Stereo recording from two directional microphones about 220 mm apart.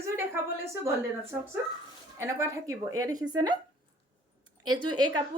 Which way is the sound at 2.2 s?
15° right (ahead or behind).